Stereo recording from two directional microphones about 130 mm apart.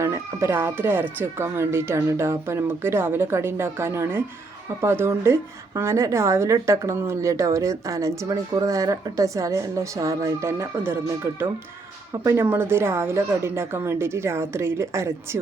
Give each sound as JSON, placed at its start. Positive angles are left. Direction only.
{"t": 0.0, "sound": "a woman's voice", "side_deg": -20}